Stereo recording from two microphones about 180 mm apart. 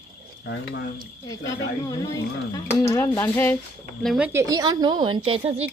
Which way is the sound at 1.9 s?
20° left (ahead or behind).